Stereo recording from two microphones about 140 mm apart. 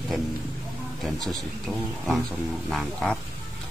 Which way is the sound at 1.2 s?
Centre (ahead or behind).